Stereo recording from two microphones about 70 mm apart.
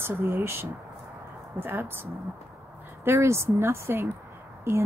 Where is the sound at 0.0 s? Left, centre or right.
Right.